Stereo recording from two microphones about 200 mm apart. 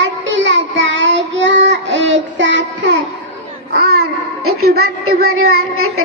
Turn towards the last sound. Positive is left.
turn(degrees=-90)